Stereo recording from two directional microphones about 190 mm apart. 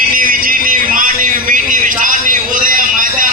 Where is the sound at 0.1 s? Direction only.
45° right (ahead or behind).